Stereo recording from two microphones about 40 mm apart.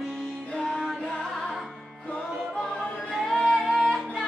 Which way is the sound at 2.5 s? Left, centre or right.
Centre.